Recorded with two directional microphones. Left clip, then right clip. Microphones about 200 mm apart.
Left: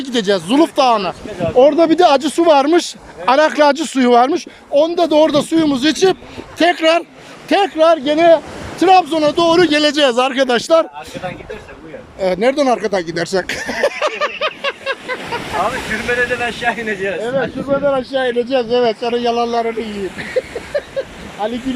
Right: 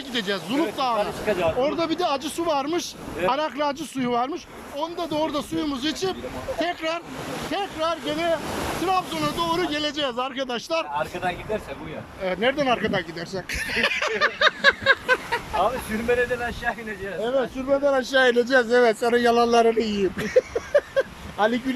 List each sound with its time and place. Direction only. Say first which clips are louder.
0.0 s speech: left 11 dB; 40° left (ahead or behind)
12.2 s speech: left 9 dB; 25° left (ahead or behind)
13.1 s speech: left 13 dB; 45° left (ahead or behind)
13.6 s speech: left 6 dB; 30° left (ahead or behind)
14.0 s a sound: left 3 dB; 15° left (ahead or behind)
15.3 s speech: left 5 dB; 5° right (ahead or behind)
16.6 s speech: left 11 dB; 30° left (ahead or behind)
17.8 s a man's voice: left 1 dB; 5° left (ahead or behind)